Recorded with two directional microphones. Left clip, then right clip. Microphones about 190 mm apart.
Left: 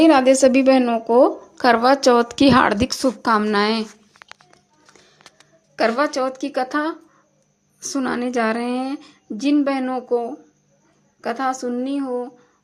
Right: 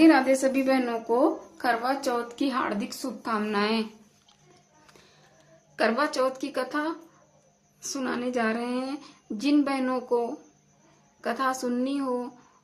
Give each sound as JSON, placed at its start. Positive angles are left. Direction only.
{"t": 0.0, "sound": "a woman's voice", "side_deg": 45}
{"t": 5.7, "sound": "a woman's voice", "side_deg": 30}